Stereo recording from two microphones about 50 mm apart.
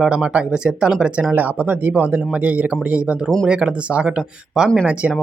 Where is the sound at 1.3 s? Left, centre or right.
Right.